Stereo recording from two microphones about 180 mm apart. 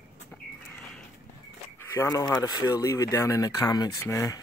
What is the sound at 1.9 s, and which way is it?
Speech, 20° left (ahead or behind).